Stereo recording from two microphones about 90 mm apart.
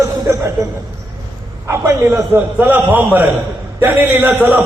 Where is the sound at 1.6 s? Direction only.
30° right (ahead or behind).